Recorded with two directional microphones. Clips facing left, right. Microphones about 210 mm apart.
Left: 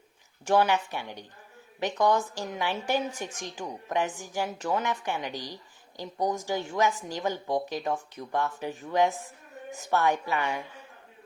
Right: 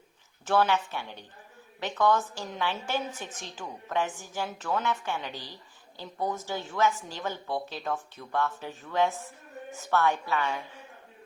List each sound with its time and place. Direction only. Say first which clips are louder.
0.4 s speech: left 2 dB; 15° left (ahead or behind)